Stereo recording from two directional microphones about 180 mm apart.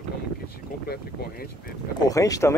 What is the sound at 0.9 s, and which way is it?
Speech, 60° left (ahead or behind).